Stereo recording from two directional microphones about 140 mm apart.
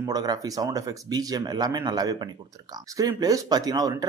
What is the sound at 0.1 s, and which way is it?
Speech, 30° right (ahead or behind).